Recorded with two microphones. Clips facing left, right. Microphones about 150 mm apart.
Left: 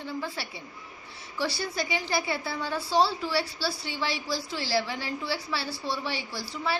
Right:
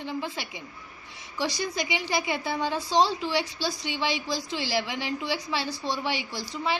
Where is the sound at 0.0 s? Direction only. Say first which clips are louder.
Right 2 dB; 20° right (ahead or behind).